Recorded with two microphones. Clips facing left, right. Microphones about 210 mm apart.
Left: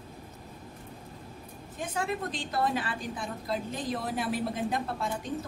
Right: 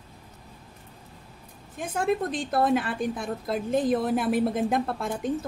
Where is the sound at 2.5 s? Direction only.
55° right (ahead or behind).